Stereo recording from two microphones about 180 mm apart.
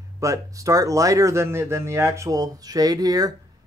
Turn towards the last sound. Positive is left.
turn(degrees=-20)  # may be behind; listen again after turning